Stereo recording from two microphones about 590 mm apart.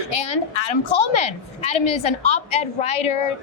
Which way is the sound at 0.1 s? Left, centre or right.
Left.